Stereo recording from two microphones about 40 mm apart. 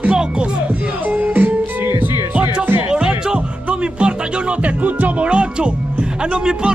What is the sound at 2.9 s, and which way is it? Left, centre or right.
Music, right.